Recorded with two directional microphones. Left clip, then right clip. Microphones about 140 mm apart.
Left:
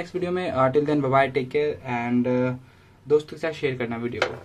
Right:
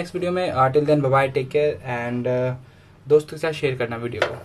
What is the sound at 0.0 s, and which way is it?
Speech, 30° left (ahead or behind).